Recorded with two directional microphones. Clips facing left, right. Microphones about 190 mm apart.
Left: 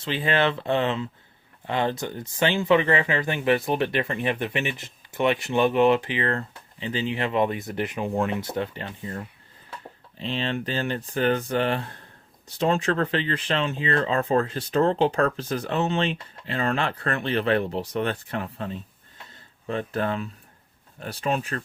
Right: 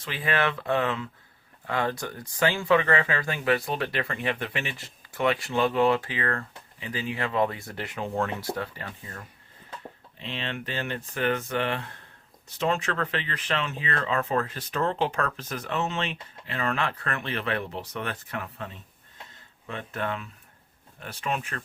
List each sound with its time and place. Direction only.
0.0 s speech: 25° left (ahead or behind)